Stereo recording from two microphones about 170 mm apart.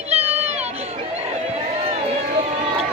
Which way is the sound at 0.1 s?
35° right (ahead or behind).